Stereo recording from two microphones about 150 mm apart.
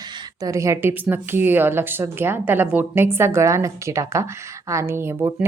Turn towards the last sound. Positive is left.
turn(degrees=-15)  # may be behind; listen again after turning